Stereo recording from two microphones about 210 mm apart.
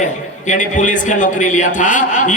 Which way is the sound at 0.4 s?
35° left (ahead or behind).